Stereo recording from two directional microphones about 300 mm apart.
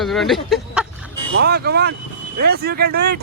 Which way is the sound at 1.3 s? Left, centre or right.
Right.